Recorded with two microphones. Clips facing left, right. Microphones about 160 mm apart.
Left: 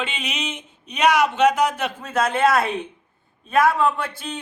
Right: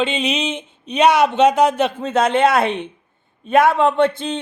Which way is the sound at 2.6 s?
5° left (ahead or behind).